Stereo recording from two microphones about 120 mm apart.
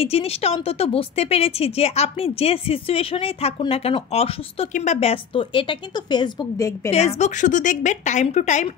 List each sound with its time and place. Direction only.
0.0 s speech: 55° left (ahead or behind)
5.1 s speech: 45° left (ahead or behind)
6.8 s a woman's voice: 25° left (ahead or behind)
7.2 s a woman's voice: 85° left